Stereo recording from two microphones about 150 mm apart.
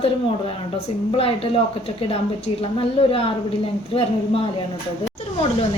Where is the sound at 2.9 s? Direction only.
40° left (ahead or behind).